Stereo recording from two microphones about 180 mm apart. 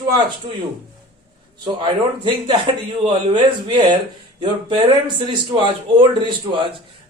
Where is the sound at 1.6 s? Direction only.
25° right (ahead or behind).